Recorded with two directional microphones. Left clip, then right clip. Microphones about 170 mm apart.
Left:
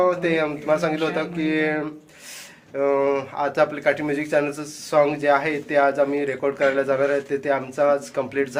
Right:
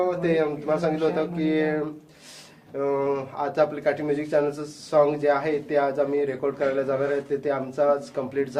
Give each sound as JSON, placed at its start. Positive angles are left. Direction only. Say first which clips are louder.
{"t": 0.0, "sound": "speech", "louder": "left 3 dB", "side_deg": 25}